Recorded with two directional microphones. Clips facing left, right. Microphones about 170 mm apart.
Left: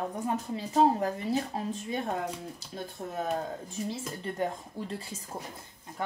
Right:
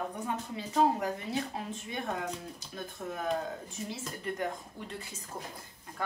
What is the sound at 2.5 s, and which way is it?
Speech, 30° left (ahead or behind).